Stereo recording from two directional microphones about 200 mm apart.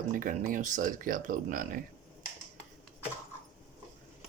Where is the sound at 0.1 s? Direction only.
40° right (ahead or behind).